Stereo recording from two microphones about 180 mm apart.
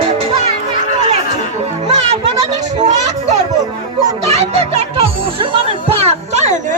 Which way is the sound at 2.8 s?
40° right (ahead or behind).